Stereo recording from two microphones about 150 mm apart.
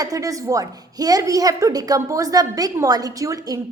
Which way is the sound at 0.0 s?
25° right (ahead or behind).